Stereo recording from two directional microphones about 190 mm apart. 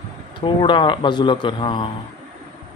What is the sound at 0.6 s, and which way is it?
Speech, 25° left (ahead or behind).